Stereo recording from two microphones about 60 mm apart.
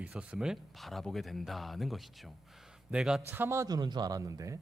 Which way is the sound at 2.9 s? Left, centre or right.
Centre.